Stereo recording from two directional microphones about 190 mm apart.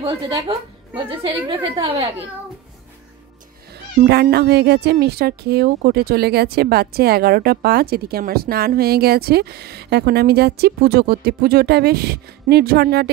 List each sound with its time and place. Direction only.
0.5 s a woman's voice: 30° right (ahead or behind)
4.0 s speech: 55° right (ahead or behind)